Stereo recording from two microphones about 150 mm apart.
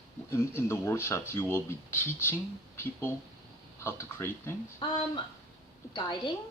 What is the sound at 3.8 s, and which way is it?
Speech, 15° left (ahead or behind).